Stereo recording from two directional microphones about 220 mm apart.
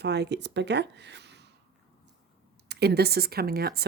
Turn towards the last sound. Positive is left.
turn(degrees=-45)  # may be behind; listen again after turning